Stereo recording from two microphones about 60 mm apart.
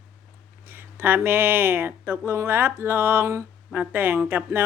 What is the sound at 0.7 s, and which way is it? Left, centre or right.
Speech, right.